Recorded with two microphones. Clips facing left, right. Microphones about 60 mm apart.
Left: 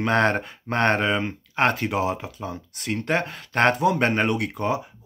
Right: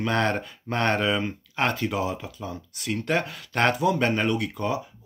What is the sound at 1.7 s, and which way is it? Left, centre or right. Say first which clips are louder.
Speech: left 3 dB; left.